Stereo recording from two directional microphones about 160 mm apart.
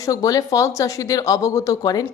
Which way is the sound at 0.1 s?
20° left (ahead or behind).